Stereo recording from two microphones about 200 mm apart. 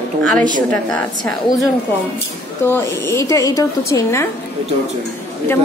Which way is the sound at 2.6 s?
10° left (ahead or behind).